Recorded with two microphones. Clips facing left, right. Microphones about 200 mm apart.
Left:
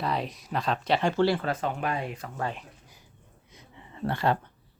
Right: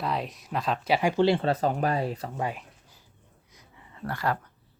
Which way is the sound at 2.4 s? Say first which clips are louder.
Even; 10° right (ahead or behind).